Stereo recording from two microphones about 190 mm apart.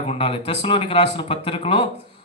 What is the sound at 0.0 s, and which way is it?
Speech, 30° left (ahead or behind).